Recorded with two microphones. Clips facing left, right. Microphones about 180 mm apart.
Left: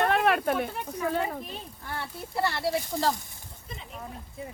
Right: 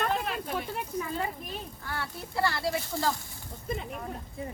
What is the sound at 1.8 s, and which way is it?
Speech, 25° left (ahead or behind).